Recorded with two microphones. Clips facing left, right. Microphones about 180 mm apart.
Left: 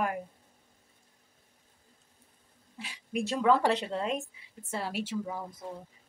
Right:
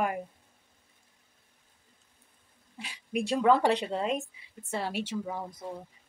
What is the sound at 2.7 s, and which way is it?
Speech, centre (ahead or behind).